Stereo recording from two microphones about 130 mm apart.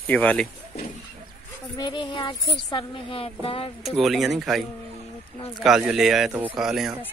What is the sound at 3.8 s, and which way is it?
Speech, centre (ahead or behind).